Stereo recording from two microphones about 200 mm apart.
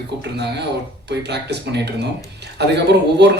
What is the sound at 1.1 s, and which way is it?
A man's voice, 55° right (ahead or behind).